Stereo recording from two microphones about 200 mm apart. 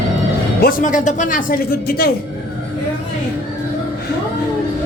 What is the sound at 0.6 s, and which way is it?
Speech, 45° left (ahead or behind).